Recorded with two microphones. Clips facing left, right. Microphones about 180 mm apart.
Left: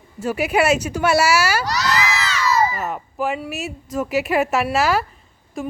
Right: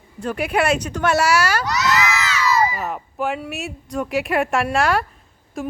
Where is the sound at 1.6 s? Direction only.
35° left (ahead or behind).